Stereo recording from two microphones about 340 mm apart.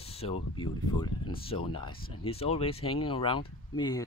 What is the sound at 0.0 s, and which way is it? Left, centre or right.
Speech, centre.